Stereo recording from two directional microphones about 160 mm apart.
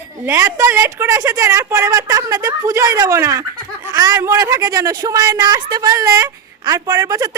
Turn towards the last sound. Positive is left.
turn(degrees=-25)  # may be behind; listen again after turning